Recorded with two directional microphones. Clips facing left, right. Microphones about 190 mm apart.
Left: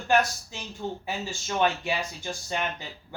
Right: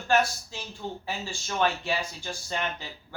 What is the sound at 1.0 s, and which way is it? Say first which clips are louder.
Speech: left 2 dB; 15° left (ahead or behind).